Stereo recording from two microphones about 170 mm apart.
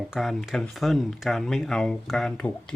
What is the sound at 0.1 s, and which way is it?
Speech, centre (ahead or behind).